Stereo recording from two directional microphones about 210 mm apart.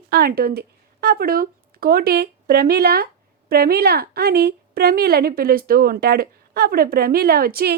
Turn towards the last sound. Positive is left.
turn(degrees=-45)  # may be behind; listen again after turning